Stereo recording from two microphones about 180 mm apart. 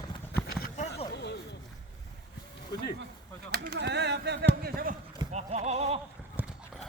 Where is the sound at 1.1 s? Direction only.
70° left (ahead or behind).